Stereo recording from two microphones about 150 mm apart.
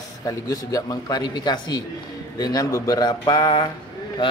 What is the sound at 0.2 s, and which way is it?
Speech, 25° left (ahead or behind).